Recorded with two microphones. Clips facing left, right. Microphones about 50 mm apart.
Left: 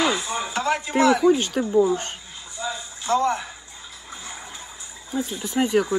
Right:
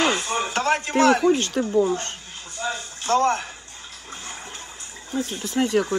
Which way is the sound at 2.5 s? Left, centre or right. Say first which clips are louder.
Right 2 dB; right.